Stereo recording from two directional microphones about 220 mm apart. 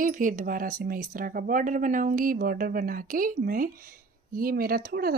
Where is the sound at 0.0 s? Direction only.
35° right (ahead or behind).